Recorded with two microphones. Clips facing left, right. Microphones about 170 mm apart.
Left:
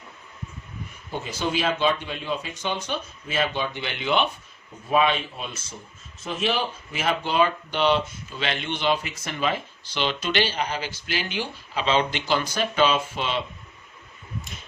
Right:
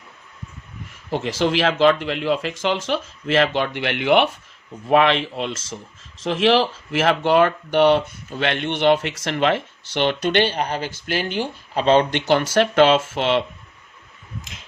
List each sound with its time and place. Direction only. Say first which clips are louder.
0.9 s speech: right 9 dB; 90° right; by 13.4 s 70° right (ahead or behind)